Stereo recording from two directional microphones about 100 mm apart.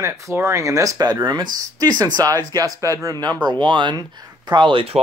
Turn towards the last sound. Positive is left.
turn(degrees=-60)  # may be behind; listen again after turning